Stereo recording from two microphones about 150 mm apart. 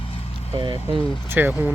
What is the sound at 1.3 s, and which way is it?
Speech, 10° right (ahead or behind).